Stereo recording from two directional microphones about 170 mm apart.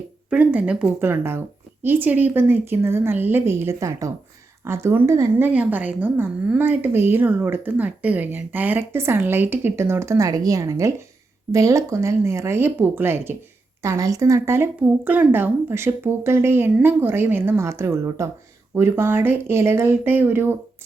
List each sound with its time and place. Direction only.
0.3 s a woman's voice: 10° right (ahead or behind)